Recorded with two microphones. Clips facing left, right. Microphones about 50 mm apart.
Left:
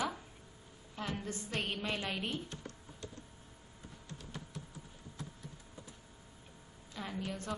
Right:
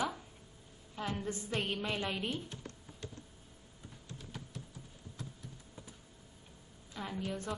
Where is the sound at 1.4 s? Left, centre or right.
Centre.